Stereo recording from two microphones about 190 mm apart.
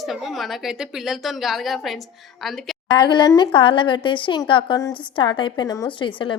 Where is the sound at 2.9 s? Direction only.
25° left (ahead or behind).